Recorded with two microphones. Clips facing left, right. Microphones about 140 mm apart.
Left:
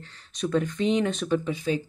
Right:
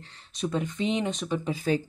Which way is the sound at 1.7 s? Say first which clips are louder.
Right 1 dB; 45° right (ahead or behind).